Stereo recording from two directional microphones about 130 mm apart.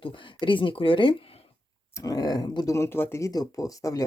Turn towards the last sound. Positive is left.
turn(degrees=25)  # may be behind; listen again after turning